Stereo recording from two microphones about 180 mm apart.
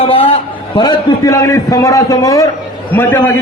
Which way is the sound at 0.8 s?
20° left (ahead or behind).